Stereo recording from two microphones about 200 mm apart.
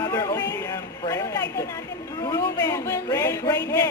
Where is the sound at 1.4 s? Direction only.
55° left (ahead or behind).